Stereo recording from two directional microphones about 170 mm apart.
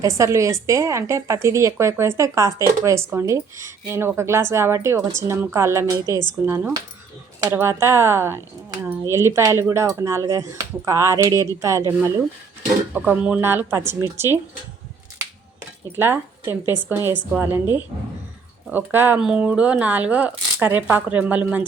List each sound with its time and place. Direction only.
0.0 s a woman's voice: 20° right (ahead or behind)
12.9 s a woman's voice: 10° right (ahead or behind)
16.0 s a woman's voice: 15° right (ahead or behind)